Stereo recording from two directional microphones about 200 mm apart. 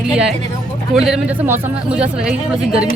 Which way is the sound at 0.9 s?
5° right (ahead or behind).